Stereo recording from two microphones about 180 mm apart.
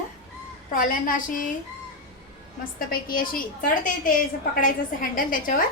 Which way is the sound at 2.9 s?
55° left (ahead or behind).